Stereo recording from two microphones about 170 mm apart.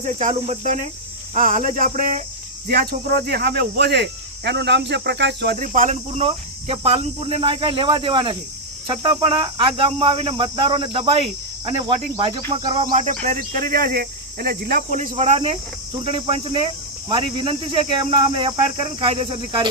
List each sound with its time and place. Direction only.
0.0 s cricket: 45° right (ahead or behind)
2.6 s speech: 65° right (ahead or behind); by 5.5 s 85° right
5.5 s speech: 50° right (ahead or behind); by 12.9 s 30° right (ahead or behind)
12.9 s cricket: 50° right (ahead or behind)
13.2 s speech: 55° right (ahead or behind)
15.1 s speech: 35° right (ahead or behind)